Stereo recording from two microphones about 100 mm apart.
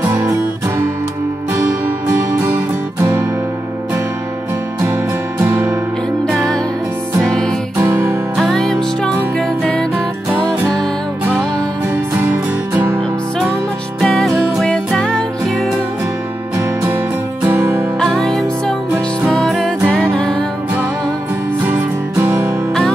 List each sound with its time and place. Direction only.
0.0 s music: 25° right (ahead or behind)
5.4 s music: 25° right (ahead or behind)
6.2 s music: centre (ahead or behind)
7.7 s music: 25° right (ahead or behind)
8.4 s music: 5° left (ahead or behind)
12.7 s music: 25° right (ahead or behind)
14.0 s music: 5° left (ahead or behind)
17.5 s music: 25° right (ahead or behind)
17.9 s music: 5° left (ahead or behind)
21.6 s music: 20° right (ahead or behind)